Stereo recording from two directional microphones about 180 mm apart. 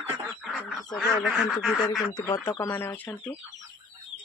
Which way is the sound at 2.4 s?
15° left (ahead or behind).